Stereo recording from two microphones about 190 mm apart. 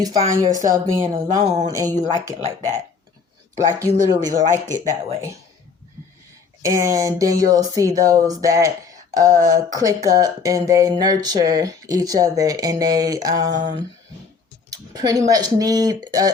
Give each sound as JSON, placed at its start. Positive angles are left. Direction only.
{"t": 0.0, "sound": "speech", "side_deg": -20}
{"t": 3.8, "sound": "speech", "side_deg": -20}
{"t": 6.6, "sound": "speech", "side_deg": -15}
{"t": 14.7, "sound": "a sound", "side_deg": -20}
{"t": 15.3, "sound": "speech", "side_deg": -20}